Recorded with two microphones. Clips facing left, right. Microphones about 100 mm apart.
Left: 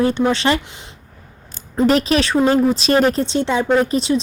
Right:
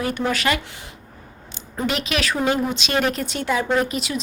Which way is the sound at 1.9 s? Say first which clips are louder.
Left 8 dB; 35° left (ahead or behind).